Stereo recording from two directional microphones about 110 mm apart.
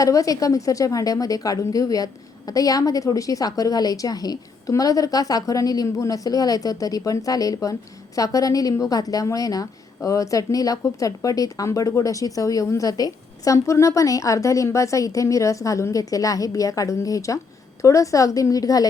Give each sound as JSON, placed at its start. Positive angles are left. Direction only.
{"t": 0.0, "sound": "a woman's voice", "side_deg": 30}